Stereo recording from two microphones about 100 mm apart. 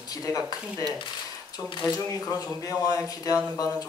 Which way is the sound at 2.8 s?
40° left (ahead or behind).